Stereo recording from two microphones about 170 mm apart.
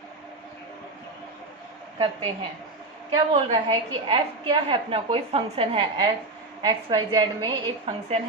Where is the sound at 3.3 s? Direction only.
30° right (ahead or behind).